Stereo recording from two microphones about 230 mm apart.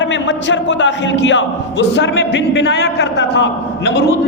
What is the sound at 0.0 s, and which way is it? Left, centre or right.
A man's voice, left.